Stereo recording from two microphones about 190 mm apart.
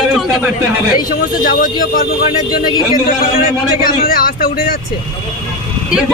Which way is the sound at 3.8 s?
50° left (ahead or behind).